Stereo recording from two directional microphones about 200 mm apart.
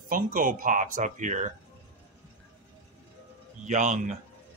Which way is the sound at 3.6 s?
35° right (ahead or behind).